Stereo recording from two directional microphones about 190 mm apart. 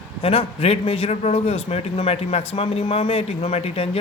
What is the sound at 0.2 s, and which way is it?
A man's voice, 30° left (ahead or behind).